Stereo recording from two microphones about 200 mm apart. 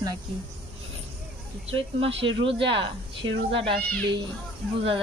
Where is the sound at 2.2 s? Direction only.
70° right (ahead or behind).